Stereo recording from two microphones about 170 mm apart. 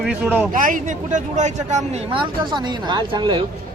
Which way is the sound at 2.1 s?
25° right (ahead or behind).